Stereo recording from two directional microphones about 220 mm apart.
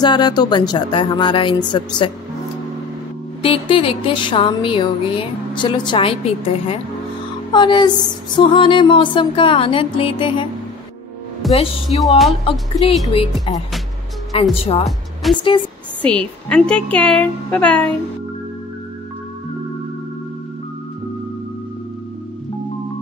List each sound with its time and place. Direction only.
0.0 s music: 20° left (ahead or behind)
3.4 s music: 25° left (ahead or behind)
11.5 s music: 25° left (ahead or behind)
15.2 s a woman's voice: centre (ahead or behind)